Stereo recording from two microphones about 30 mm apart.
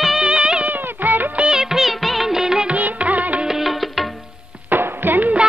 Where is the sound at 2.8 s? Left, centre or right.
Right.